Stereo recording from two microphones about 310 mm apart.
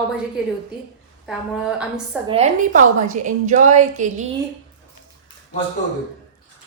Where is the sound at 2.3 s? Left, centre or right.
Right.